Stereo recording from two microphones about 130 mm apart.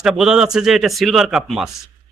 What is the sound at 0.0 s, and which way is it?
Speech, 5° right (ahead or behind).